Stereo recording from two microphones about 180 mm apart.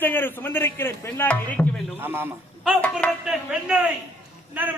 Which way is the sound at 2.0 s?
10° right (ahead or behind).